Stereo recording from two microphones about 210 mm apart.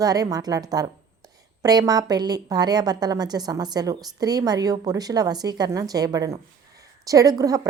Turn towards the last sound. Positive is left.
turn(degrees=-15)  # may be behind; listen again after turning